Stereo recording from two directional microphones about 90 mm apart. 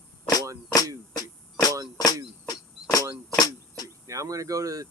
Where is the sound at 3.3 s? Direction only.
45° left (ahead or behind).